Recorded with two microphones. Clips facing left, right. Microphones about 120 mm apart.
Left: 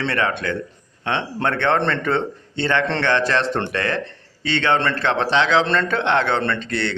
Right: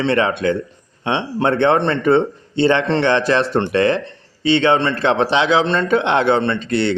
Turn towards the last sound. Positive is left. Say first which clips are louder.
# right 5 dB
turn(degrees=-15)  # may be behind; listen again after turning